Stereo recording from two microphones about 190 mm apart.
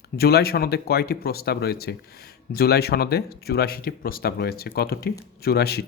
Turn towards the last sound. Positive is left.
turn(degrees=55)  # may be behind; listen again after turning